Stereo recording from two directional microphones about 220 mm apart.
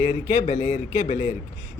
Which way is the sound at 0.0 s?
35° left (ahead or behind).